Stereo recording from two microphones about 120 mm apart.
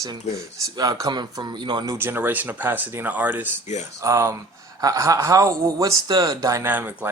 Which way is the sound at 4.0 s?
25° right (ahead or behind).